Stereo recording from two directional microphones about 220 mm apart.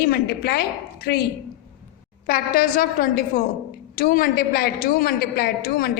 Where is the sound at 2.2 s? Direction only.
40° left (ahead or behind).